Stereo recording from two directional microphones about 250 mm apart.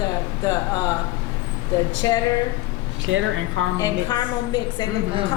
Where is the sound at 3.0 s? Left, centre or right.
Right.